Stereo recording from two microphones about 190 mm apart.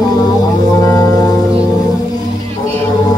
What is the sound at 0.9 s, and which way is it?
Music, 20° left (ahead or behind).